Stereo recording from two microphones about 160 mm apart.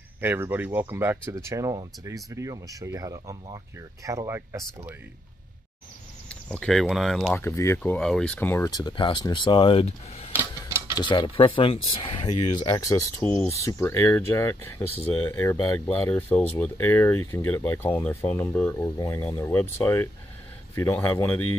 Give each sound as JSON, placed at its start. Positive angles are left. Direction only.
{"t": 0.2, "sound": "speech", "side_deg": -10}
{"t": 6.2, "sound": "speech", "side_deg": 5}
{"t": 7.3, "sound": "speech", "side_deg": 15}
{"t": 8.0, "sound": "speech", "side_deg": 5}
{"t": 11.0, "sound": "speech", "side_deg": 30}